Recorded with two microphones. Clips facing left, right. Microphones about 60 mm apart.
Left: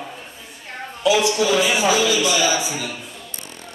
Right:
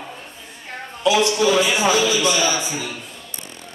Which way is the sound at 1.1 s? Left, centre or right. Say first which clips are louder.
Right 1 dB; centre.